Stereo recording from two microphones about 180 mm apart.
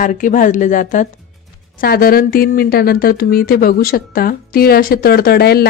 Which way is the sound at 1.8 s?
55° left (ahead or behind).